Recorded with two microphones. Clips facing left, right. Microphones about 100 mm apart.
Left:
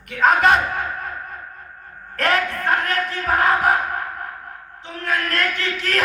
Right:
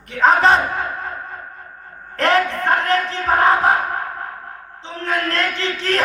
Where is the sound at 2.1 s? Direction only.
30° right (ahead or behind).